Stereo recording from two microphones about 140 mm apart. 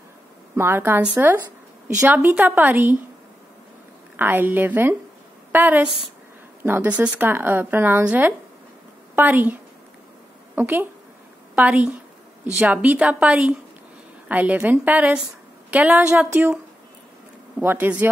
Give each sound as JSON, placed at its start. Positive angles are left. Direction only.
{"t": 0.6, "sound": "speech", "side_deg": -15}
{"t": 4.2, "sound": "a woman's voice", "side_deg": -15}
{"t": 17.6, "sound": "speech", "side_deg": -15}